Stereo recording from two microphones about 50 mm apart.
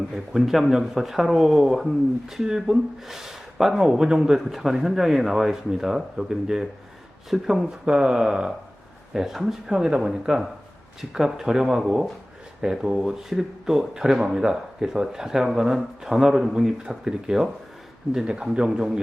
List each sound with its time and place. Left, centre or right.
0.1 s speech: centre
2.2 s speech: centre
18.5 s speech: centre